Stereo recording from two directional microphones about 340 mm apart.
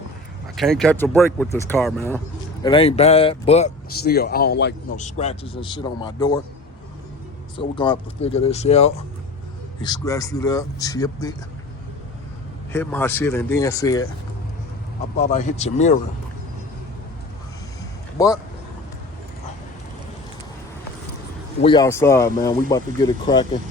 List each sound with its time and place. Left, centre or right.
0.5 s speech: centre
2.6 s speech: centre
7.5 s speech: centre
12.7 s speech: centre
15.2 s speech: left
18.2 s speech: centre
21.6 s speech: centre